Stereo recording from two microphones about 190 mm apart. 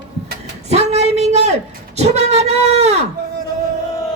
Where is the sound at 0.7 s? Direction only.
35° right (ahead or behind).